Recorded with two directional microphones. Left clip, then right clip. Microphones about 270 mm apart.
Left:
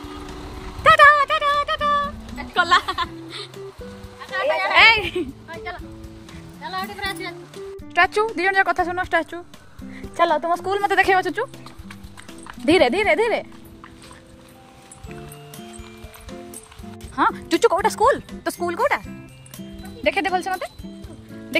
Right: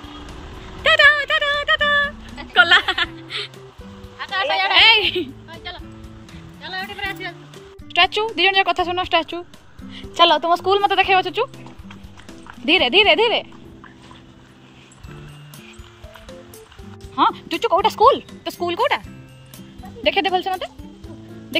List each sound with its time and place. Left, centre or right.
0.8 s dog: centre
2.5 s music: centre
4.4 s a woman's voice: right
4.7 s a woman's voice: centre
5.5 s music: right
6.6 s speech: centre; by 11.4 s left
12.6 s speech: left
17.1 s speech: left
19.5 s music: centre